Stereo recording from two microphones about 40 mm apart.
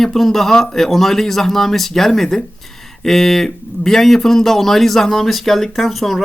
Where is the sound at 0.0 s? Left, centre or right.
Centre.